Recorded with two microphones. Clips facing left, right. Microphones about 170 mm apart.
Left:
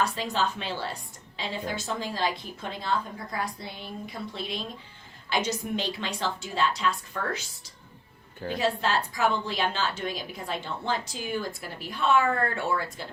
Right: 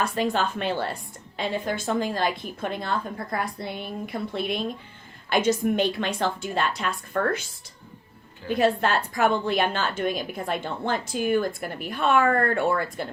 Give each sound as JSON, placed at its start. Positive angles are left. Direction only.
{"t": 0.0, "sound": "a woman's voice", "side_deg": -55}
{"t": 8.4, "sound": "a woman's voice", "side_deg": -55}